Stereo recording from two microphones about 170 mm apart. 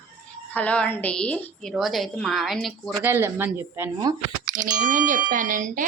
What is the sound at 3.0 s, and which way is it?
Speech, 15° right (ahead or behind).